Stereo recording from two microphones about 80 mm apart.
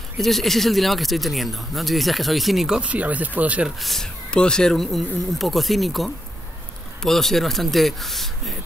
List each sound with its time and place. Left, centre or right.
0.2 s speech: centre
2.8 s speech: centre
3.8 s speech: centre